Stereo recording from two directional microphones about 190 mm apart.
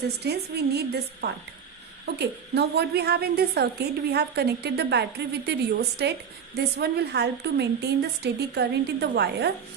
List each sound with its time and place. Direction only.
0.0 s a woman's voice: 60° right (ahead or behind)